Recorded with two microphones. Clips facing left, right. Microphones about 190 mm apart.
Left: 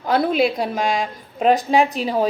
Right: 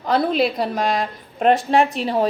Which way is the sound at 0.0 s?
Centre (ahead or behind).